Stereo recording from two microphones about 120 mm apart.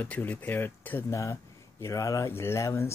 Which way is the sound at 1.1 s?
25° left (ahead or behind).